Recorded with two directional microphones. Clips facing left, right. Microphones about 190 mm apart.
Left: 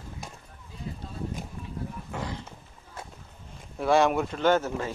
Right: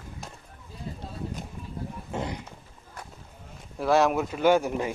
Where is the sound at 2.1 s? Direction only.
20° right (ahead or behind).